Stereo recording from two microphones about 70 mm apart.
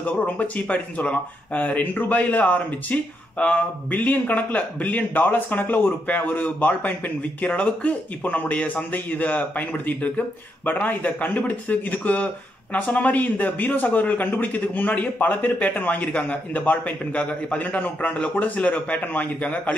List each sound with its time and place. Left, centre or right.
0.0 s speech: left